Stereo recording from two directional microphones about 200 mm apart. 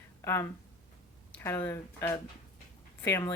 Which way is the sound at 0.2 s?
15° left (ahead or behind).